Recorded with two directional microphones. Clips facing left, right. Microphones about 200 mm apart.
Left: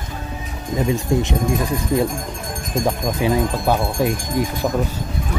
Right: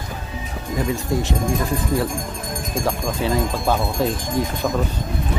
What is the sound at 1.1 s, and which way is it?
Speech, 20° left (ahead or behind).